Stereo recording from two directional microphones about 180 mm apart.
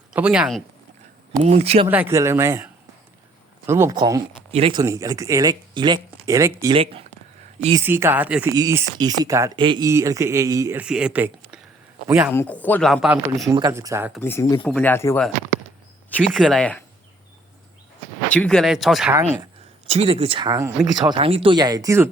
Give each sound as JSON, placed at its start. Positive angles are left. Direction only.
{"t": 0.1, "sound": "speech", "side_deg": -5}
{"t": 1.4, "sound": "speech", "side_deg": -35}
{"t": 1.9, "sound": "speech", "side_deg": -10}
{"t": 3.7, "sound": "speech", "side_deg": -15}
{"t": 4.5, "sound": "speech", "side_deg": -30}
{"t": 4.8, "sound": "speech", "side_deg": -20}
{"t": 7.8, "sound": "speech", "side_deg": -15}
{"t": 12.3, "sound": "speech", "side_deg": 10}
{"t": 13.5, "sound": "speech", "side_deg": -15}
{"t": 14.2, "sound": "speech", "side_deg": 15}
{"t": 16.0, "sound": "speech", "side_deg": 0}
{"t": 18.3, "sound": "speech", "side_deg": 5}
{"t": 19.9, "sound": "speech", "side_deg": -35}